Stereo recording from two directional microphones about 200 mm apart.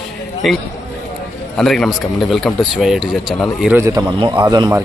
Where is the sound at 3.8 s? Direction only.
15° right (ahead or behind).